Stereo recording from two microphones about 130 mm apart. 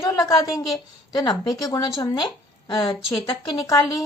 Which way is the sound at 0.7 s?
30° left (ahead or behind).